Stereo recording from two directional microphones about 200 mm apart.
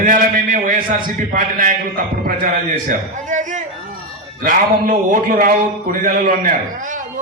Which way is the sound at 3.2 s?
40° right (ahead or behind).